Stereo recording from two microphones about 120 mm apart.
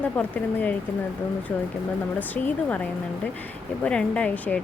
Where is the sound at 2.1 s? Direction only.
15° left (ahead or behind).